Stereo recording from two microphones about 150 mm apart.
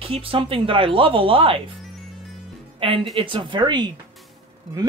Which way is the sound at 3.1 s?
30° right (ahead or behind).